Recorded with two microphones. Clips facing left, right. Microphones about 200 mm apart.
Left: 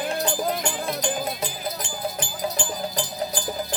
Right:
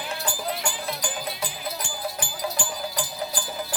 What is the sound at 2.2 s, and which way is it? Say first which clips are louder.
Music: left 2 dB; 20° left (ahead or behind).